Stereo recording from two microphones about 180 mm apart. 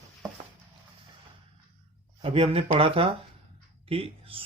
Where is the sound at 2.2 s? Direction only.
30° right (ahead or behind).